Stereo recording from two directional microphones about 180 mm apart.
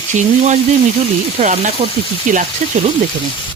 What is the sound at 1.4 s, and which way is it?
Speech, 40° right (ahead or behind).